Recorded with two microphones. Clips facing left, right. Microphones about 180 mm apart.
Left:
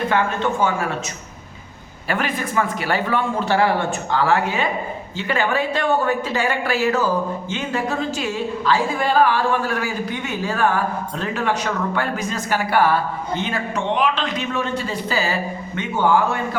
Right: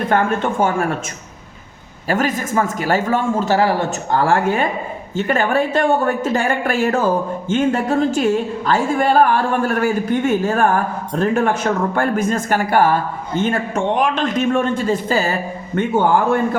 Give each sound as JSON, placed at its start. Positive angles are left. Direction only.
{"t": 0.1, "sound": "a woman's voice", "side_deg": -50}
{"t": 2.0, "sound": "a woman's voice", "side_deg": -40}